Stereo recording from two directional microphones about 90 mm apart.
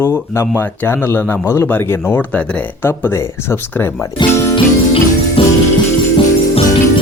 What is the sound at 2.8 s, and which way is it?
Speech, 25° left (ahead or behind).